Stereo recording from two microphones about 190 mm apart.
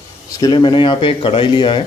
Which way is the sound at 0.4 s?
25° left (ahead or behind).